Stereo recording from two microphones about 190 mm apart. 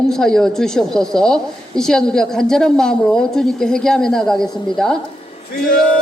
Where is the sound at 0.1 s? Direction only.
5° left (ahead or behind).